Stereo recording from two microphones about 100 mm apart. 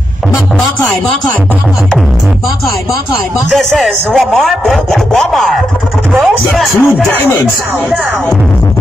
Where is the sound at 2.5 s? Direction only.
30° left (ahead or behind).